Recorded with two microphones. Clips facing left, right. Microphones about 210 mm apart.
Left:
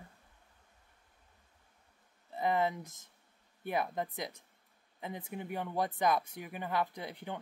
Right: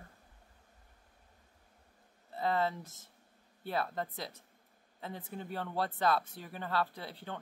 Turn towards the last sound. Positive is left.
turn(degrees=15)  # may be behind; listen again after turning